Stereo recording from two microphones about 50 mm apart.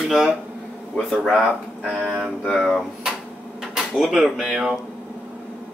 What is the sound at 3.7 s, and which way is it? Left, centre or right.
Speech, centre.